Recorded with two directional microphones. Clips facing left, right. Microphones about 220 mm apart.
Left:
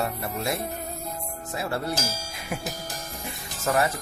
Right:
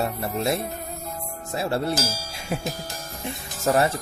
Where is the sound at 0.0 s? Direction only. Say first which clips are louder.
Right 3 dB; 25° right (ahead or behind).